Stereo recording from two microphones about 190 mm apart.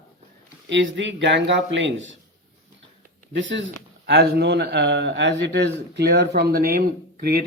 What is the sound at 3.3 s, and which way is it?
Speech, 75° right (ahead or behind).